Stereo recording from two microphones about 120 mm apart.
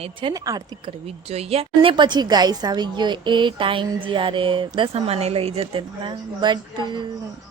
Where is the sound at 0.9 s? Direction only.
60° right (ahead or behind).